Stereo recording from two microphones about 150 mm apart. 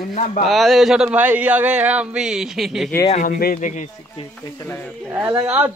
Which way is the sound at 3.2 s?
70° left (ahead or behind).